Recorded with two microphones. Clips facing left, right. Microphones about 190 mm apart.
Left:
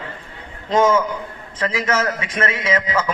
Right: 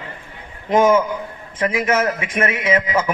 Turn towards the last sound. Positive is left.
turn(degrees=-15)  # may be behind; listen again after turning